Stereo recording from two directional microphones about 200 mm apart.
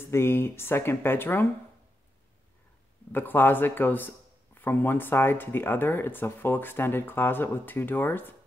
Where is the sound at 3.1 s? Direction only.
10° left (ahead or behind).